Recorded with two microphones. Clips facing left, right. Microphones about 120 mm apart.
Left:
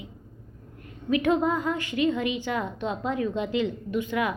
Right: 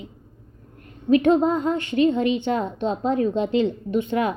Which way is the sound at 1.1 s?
30° right (ahead or behind).